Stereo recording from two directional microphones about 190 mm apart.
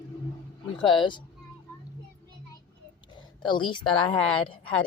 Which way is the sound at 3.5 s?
25° left (ahead or behind).